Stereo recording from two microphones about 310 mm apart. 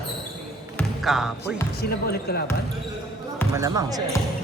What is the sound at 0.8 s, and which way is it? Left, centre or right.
Speech, centre.